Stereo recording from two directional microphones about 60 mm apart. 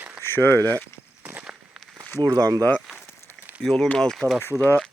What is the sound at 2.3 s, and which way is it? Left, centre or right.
Speech, right.